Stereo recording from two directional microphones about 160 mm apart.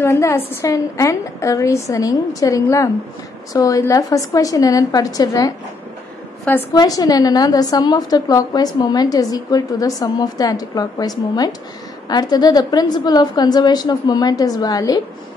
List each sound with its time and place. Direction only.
0.0 s a woman's voice: 15° left (ahead or behind)
6.7 s a woman's voice: 25° left (ahead or behind)